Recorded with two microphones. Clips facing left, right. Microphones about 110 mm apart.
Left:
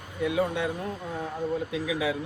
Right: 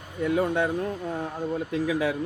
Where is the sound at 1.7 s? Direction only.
45° right (ahead or behind).